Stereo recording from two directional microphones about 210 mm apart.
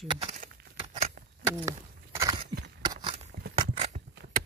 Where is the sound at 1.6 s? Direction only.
15° right (ahead or behind).